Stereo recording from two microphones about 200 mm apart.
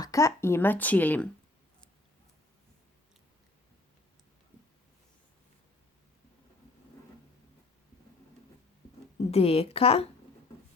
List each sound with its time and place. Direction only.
0.0 s speech: 15° left (ahead or behind)
9.3 s a woman's voice: 30° left (ahead or behind)